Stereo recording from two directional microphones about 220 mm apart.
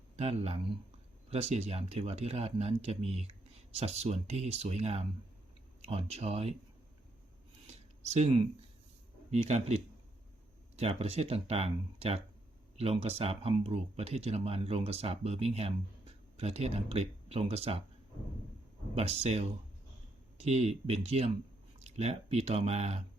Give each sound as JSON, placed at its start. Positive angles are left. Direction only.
{"t": 0.2, "sound": "speech", "side_deg": -30}
{"t": 7.7, "sound": "a sound", "side_deg": -30}
{"t": 9.3, "sound": "speech", "side_deg": -30}
{"t": 10.8, "sound": "speech", "side_deg": -30}
{"t": 18.9, "sound": "speech", "side_deg": -30}